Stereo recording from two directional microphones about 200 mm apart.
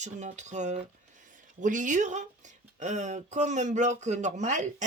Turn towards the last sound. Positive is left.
turn(degrees=-40)  # may be behind; listen again after turning